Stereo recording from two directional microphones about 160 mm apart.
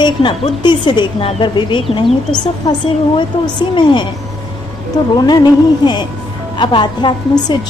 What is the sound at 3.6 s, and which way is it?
Speech, 30° left (ahead or behind).